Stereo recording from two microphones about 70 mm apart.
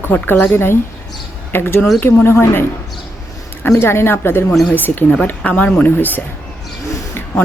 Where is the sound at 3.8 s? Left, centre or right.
Left.